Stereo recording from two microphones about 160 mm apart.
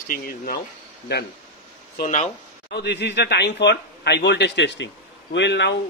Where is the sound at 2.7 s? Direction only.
90° left.